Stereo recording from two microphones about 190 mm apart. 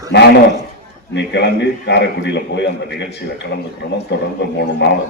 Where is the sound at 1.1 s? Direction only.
65° left (ahead or behind).